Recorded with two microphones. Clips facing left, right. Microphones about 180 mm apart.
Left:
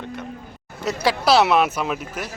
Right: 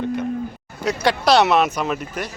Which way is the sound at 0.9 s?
5° left (ahead or behind).